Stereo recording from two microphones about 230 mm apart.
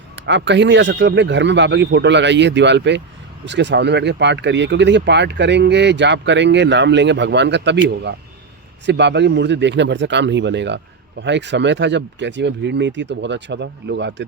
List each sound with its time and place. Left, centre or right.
0.2 s speech: right